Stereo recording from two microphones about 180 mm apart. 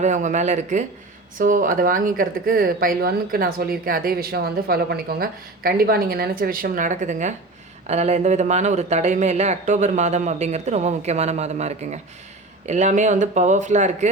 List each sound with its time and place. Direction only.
0.0 s speech: 40° right (ahead or behind)